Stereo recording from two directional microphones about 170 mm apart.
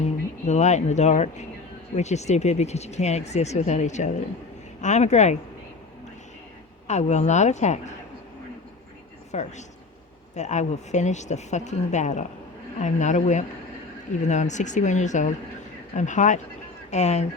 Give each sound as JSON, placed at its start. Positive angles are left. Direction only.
{"t": 0.0, "sound": "speech", "side_deg": 40}
{"t": 6.8, "sound": "speech", "side_deg": 40}
{"t": 9.3, "sound": "speech", "side_deg": 45}